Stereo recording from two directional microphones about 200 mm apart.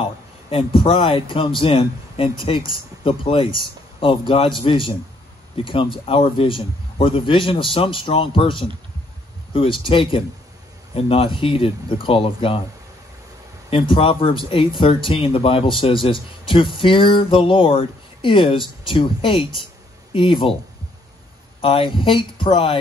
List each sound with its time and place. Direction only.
0.0 s speech: 25° left (ahead or behind)
13.7 s speech: 25° left (ahead or behind)
21.5 s speech: 25° left (ahead or behind)